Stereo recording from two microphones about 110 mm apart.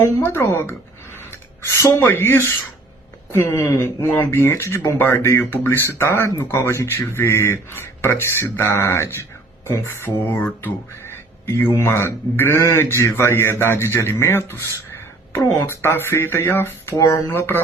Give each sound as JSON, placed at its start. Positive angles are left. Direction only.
{"t": 0.3, "sound": "speech", "side_deg": 25}
{"t": 11.0, "sound": "duck", "side_deg": 20}
{"t": 11.8, "sound": "speech", "side_deg": 20}